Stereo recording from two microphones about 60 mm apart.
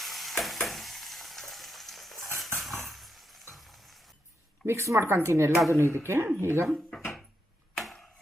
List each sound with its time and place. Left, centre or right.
0.0 s frying: centre
2.6 s chink: centre
3.5 s a sound: centre
4.6 s speech: right
7.8 s chop: centre